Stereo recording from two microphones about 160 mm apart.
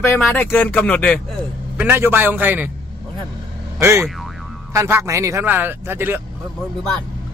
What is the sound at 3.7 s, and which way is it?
Speech, 15° right (ahead or behind).